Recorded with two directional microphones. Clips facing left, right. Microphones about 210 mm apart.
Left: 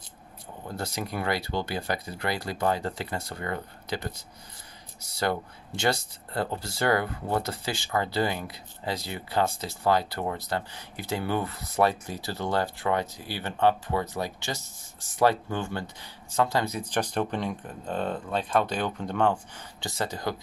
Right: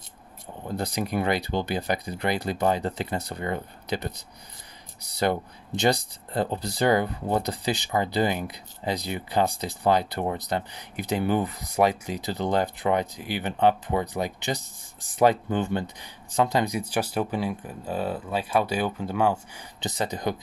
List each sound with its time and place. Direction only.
0.7 s speech: 15° right (ahead or behind)